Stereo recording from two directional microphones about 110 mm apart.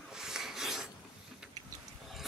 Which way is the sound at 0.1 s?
5° right (ahead or behind).